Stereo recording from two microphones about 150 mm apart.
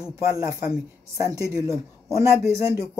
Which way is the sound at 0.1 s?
20° right (ahead or behind).